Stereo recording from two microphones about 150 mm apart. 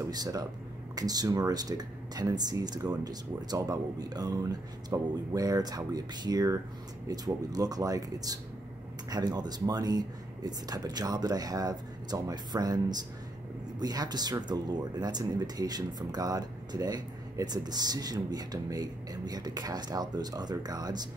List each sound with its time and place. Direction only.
0.0 s speech: 25° right (ahead or behind)